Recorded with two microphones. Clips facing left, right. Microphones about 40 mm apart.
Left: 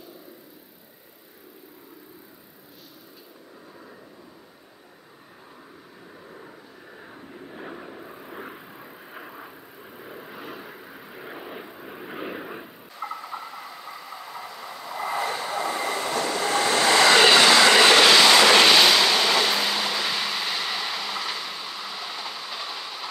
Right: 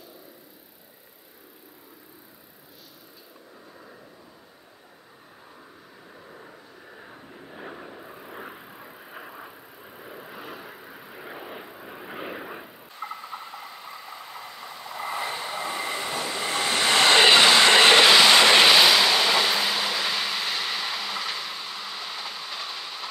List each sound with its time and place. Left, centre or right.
6.3 s vehicle: centre
13.0 s vehicle: centre
15.1 s train: left
16.8 s train: right
17.2 s train: centre
18.0 s vehicle: centre